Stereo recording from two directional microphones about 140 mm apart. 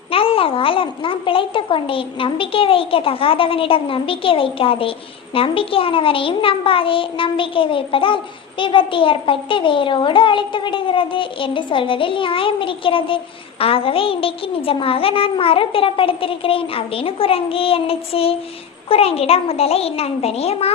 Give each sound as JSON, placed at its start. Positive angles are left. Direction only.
{"t": 0.1, "sound": "a child's voice", "side_deg": 40}